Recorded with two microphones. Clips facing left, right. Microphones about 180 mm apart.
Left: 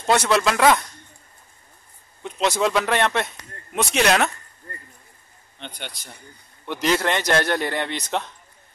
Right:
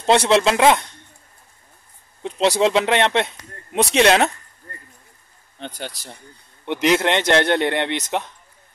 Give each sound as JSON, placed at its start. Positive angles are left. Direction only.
{"t": 0.0, "sound": "speech", "side_deg": -25}
{"t": 2.2, "sound": "speech", "side_deg": -30}
{"t": 5.8, "sound": "speech", "side_deg": -35}
{"t": 6.6, "sound": "speech", "side_deg": -20}